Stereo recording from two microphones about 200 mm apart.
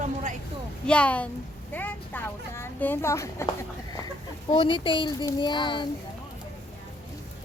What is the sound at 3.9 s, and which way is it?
Speech, 20° left (ahead or behind).